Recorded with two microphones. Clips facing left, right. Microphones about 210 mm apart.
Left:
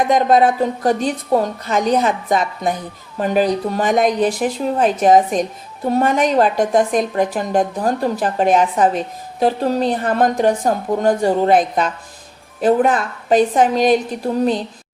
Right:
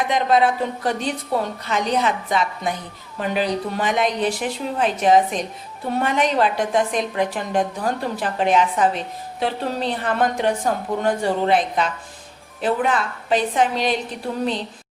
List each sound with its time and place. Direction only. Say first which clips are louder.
0.1 s a woman's voice: left 4 dB; 45° left (ahead or behind)